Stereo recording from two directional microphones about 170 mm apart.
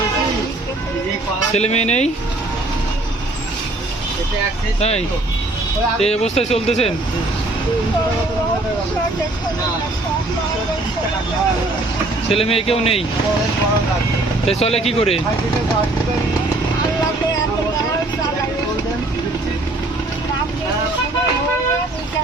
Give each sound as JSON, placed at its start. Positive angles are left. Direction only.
{"t": 1.5, "sound": "speech", "side_deg": 40}
{"t": 4.8, "sound": "speech", "side_deg": 40}
{"t": 12.3, "sound": "speech", "side_deg": 35}
{"t": 14.4, "sound": "speech", "side_deg": 35}